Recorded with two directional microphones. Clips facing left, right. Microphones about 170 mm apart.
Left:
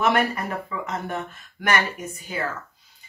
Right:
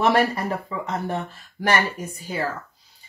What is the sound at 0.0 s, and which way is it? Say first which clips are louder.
Speech: right 2 dB; 35° right (ahead or behind).